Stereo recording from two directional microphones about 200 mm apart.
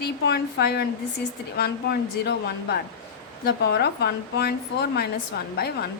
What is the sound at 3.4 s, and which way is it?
A woman's voice, 55° left (ahead or behind).